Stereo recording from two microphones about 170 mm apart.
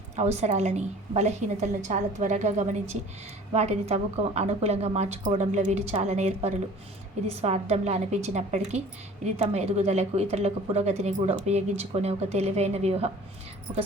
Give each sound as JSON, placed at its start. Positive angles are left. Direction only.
{"t": 0.2, "sound": "a woman's voice", "side_deg": -40}